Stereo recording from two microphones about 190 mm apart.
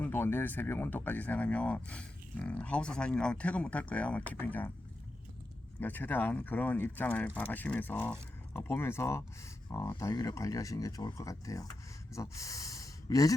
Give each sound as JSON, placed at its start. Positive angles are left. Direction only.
{"t": 0.0, "sound": "speech", "side_deg": 10}
{"t": 5.8, "sound": "speech", "side_deg": 10}